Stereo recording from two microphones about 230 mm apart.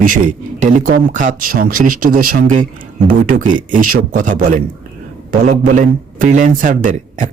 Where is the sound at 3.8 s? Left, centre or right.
Right.